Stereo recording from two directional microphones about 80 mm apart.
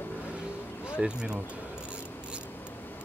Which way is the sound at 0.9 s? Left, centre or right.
Centre.